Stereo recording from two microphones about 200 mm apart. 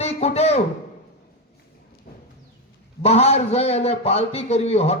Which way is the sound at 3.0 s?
30° left (ahead or behind).